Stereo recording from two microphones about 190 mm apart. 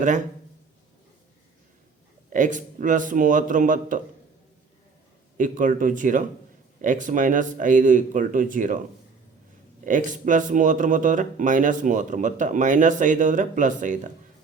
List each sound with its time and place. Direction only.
2.3 s speech: 40° right (ahead or behind)
5.4 s speech: 45° right (ahead or behind)
9.8 s speech: 40° right (ahead or behind)